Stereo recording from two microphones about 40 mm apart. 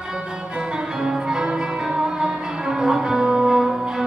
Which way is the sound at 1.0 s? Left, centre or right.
Centre.